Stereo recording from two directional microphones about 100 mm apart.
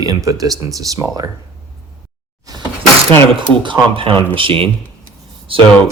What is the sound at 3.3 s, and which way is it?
Speech, 60° right (ahead or behind).